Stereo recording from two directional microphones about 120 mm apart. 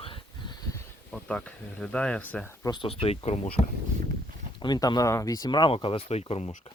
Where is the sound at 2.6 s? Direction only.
40° left (ahead or behind).